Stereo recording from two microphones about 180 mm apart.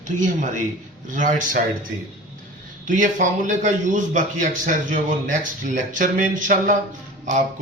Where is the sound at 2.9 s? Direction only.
45° right (ahead or behind).